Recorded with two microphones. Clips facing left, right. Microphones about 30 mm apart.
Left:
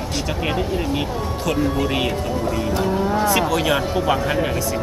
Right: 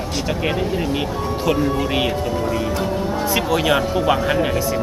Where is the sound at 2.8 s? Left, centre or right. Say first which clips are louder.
Left 2 dB; centre.